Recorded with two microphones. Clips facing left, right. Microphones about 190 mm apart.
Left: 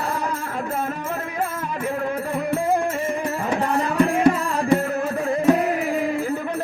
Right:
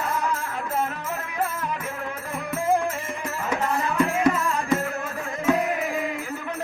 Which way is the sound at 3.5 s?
35° left (ahead or behind).